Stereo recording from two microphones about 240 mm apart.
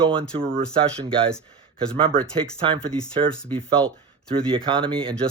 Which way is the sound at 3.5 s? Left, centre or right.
Right.